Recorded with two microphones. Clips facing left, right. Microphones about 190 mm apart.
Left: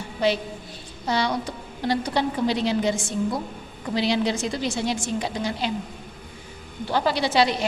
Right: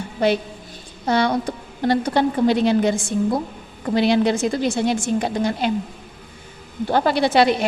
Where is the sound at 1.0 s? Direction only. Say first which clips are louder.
Right 5 dB; 55° right (ahead or behind).